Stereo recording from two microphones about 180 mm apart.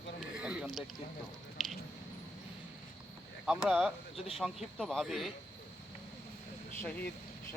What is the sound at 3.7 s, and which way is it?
Speech, centre (ahead or behind).